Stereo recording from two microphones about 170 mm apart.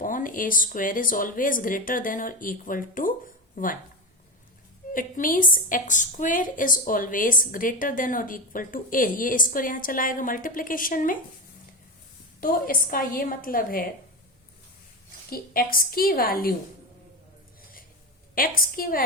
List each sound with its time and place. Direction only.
0.0 s a woman's voice: 55° left (ahead or behind)
4.9 s a woman's voice: 55° left (ahead or behind)
12.4 s a woman's voice: 55° left (ahead or behind)
15.3 s a woman's voice: 60° left (ahead or behind)
18.3 s a woman's voice: 60° left (ahead or behind)